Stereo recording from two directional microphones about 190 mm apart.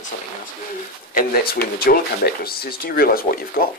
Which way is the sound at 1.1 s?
55° left (ahead or behind).